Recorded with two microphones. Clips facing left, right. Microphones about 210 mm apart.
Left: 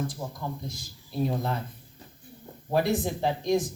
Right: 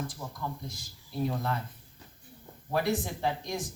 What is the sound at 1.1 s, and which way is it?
Speech, 25° left (ahead or behind).